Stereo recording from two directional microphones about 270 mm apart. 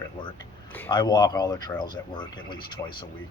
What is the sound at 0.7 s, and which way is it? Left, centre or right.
Speech, centre.